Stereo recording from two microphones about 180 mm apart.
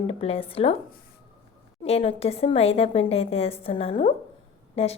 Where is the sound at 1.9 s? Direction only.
35° left (ahead or behind).